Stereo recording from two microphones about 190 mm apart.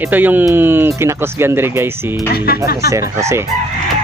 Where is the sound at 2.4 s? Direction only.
55° left (ahead or behind).